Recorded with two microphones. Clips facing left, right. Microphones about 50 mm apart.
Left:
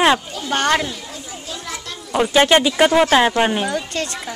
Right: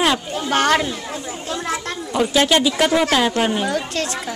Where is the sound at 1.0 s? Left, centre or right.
Right.